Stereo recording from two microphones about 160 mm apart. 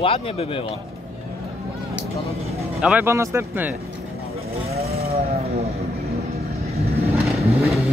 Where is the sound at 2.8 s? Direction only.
10° right (ahead or behind).